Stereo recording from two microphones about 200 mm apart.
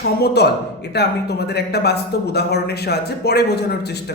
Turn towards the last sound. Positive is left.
turn(degrees=55)  # may be behind; listen again after turning